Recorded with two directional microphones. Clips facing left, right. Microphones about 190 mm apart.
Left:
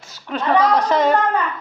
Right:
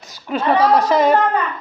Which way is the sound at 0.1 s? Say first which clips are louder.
Right 1 dB; 10° right (ahead or behind).